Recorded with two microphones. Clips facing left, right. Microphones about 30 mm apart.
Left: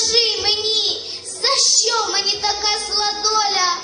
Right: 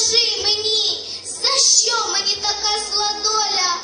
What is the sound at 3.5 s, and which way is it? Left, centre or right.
Speech, left.